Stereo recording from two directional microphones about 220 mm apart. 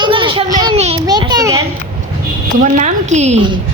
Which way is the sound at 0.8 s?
30° right (ahead or behind).